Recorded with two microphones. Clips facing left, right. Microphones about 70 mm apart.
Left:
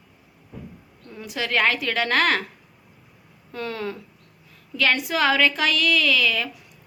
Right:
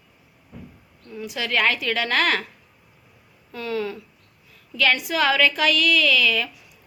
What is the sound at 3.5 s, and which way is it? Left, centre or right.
A woman's voice, left.